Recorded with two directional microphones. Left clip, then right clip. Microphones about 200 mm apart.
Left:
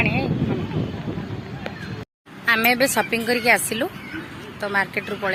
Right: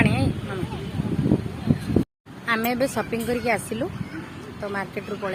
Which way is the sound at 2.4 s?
Centre (ahead or behind).